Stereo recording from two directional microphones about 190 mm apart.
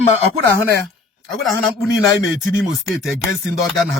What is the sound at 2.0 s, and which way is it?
Speech, 20° left (ahead or behind).